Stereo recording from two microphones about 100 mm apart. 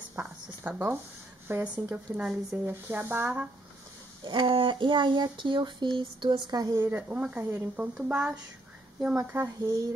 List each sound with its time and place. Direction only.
0.1 s a sound: 20° right (ahead or behind)
1.5 s speech: 20° right (ahead or behind)
4.2 s speech: 50° right (ahead or behind)
6.8 s speech: 20° right (ahead or behind)
9.6 s speech: 40° right (ahead or behind)